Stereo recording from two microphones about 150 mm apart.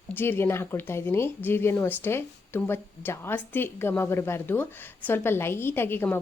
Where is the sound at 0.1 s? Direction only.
15° left (ahead or behind).